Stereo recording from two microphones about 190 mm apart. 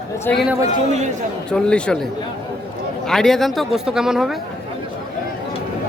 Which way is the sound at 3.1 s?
Centre (ahead or behind).